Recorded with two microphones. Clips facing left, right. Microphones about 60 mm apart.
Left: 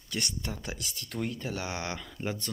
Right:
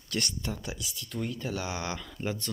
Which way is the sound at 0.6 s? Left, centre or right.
Left.